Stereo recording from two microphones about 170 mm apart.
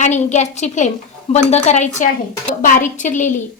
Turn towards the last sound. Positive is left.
turn(degrees=50)  # may be behind; listen again after turning